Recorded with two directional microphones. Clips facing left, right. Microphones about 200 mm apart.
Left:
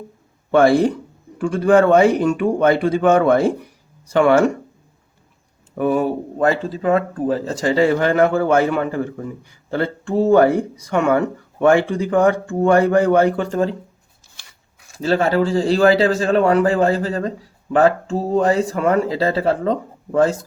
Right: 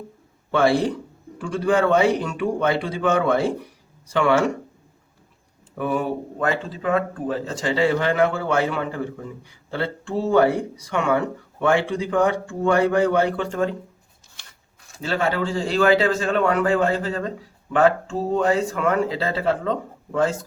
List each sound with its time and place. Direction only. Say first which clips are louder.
0.5 s speech: left 6 dB; 45° left (ahead or behind)
5.7 s speech: left 6 dB; 40° left (ahead or behind)
15.0 s a man's voice: left 6 dB; 40° left (ahead or behind)